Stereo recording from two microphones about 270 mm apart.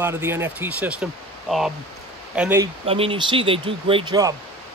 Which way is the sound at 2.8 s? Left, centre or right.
Right.